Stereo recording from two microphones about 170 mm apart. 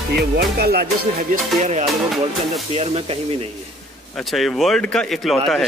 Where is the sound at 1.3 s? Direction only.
45° right (ahead or behind).